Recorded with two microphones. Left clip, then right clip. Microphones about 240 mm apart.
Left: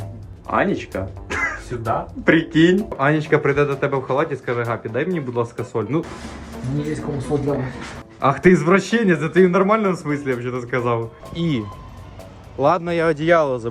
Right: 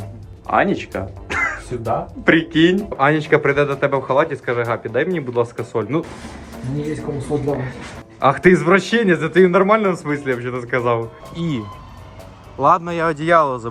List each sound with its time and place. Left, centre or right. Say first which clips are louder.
0.4 s speech: right 3 dB; centre
12.5 s speech: right 2 dB; right